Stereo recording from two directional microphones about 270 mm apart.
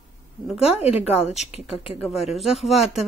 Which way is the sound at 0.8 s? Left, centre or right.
Left.